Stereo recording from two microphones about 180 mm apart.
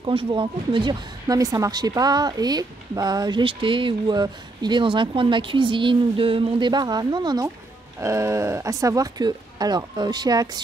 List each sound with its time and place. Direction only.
0.0 s speech: 30° right (ahead or behind)